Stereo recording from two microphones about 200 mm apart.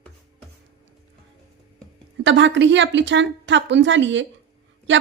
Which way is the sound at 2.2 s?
65° right (ahead or behind).